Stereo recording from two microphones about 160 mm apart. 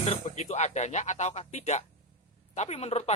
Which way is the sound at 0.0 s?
45° left (ahead or behind).